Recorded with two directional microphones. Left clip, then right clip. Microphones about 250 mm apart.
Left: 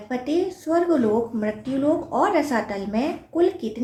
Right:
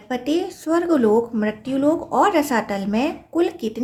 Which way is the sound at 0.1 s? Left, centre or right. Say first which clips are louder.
Right 1 dB; right.